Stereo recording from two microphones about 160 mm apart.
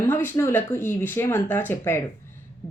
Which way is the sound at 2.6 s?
20° left (ahead or behind).